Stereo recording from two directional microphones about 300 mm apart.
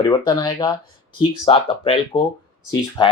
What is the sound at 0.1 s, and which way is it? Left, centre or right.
Speech, centre.